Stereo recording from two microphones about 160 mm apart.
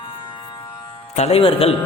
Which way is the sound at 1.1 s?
40° left (ahead or behind).